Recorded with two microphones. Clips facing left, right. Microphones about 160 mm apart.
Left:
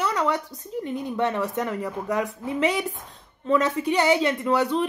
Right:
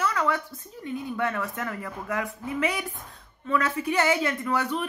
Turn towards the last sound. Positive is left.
turn(degrees=25)  # may be behind; listen again after turning